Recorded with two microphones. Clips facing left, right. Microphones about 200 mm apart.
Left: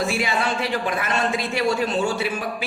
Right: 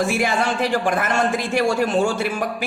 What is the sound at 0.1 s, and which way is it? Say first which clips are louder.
A man's voice: right 3 dB; 50° right (ahead or behind).